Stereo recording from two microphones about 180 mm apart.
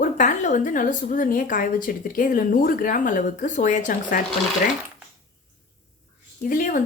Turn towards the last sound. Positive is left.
turn(degrees=50)  # may be behind; listen again after turning